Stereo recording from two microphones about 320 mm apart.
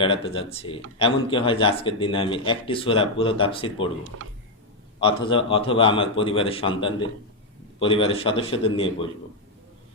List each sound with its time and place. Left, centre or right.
0.0 s speech: centre
4.9 s speech: centre